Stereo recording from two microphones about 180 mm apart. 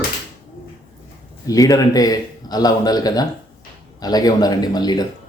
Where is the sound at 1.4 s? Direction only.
20° left (ahead or behind).